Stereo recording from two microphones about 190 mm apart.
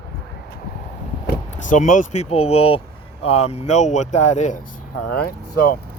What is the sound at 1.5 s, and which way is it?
Speech, 40° left (ahead or behind).